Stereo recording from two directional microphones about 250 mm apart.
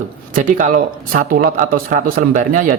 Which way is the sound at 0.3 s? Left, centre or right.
Right.